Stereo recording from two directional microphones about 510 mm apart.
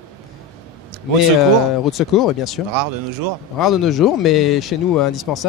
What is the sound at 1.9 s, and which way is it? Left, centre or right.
Speech, centre.